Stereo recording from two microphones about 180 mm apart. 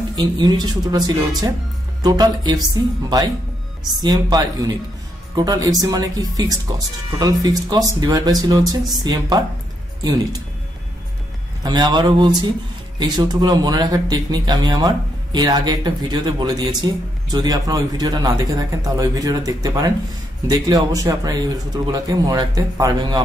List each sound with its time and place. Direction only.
0.1 s speech: 25° right (ahead or behind)
11.6 s speech: 25° right (ahead or behind)